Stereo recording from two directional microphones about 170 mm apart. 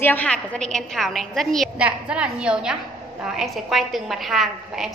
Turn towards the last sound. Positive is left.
turn(degrees=0)  # may be behind; listen again after turning